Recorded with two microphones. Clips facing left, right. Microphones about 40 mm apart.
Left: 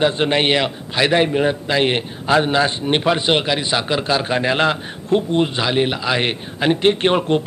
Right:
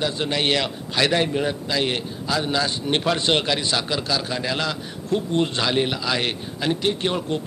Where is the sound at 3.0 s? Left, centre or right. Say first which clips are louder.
Left 3 dB; centre.